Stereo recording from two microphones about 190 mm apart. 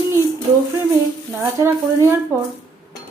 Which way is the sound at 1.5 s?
15° right (ahead or behind).